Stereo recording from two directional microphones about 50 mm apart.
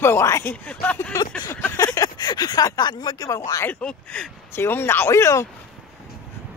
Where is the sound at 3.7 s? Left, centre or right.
Left.